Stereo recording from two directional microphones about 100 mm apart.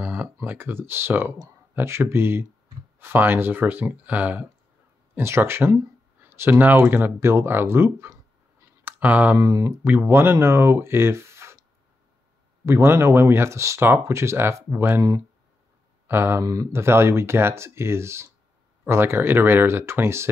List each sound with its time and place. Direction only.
0.0 s speech: 20° right (ahead or behind)
9.0 s speech: 15° right (ahead or behind)
9.4 s speech: 30° right (ahead or behind)
12.6 s speech: 25° right (ahead or behind)
16.1 s speech: 25° right (ahead or behind)